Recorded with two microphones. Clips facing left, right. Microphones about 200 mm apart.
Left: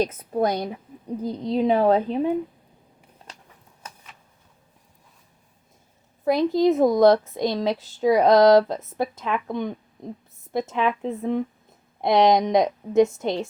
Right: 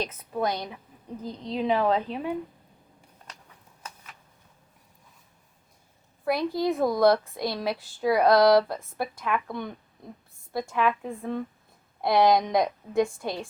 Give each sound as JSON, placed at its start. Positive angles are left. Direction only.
{"t": 0.0, "sound": "a woman's voice", "side_deg": 45}
{"t": 6.2, "sound": "a woman's voice", "side_deg": 20}